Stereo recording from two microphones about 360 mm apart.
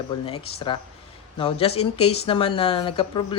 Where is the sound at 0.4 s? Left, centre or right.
Centre.